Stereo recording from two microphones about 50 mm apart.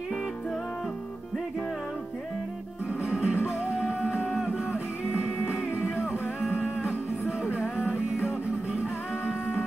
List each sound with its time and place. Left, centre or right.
3.1 s music: right
3.8 s music: left
4.2 s music: centre
6.5 s music: right
7.7 s music: left